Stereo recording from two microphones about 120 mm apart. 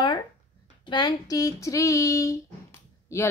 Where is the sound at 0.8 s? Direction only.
40° left (ahead or behind).